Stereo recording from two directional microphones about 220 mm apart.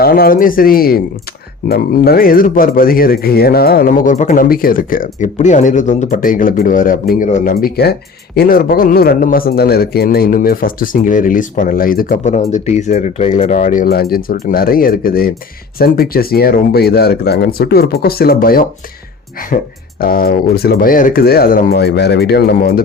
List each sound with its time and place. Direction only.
0.0 s speech: 45° left (ahead or behind)